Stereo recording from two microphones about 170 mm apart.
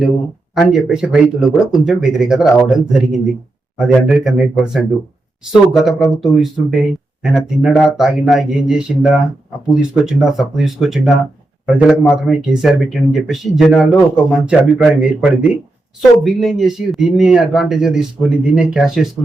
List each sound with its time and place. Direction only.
0.5 s speech: centre (ahead or behind)